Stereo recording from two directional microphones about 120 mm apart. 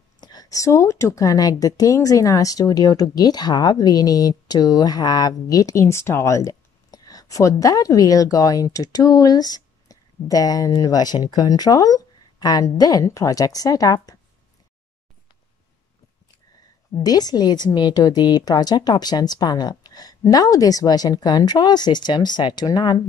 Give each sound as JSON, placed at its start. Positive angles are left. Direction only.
{"t": 0.2, "sound": "speech", "side_deg": 35}
{"t": 17.0, "sound": "speech", "side_deg": 35}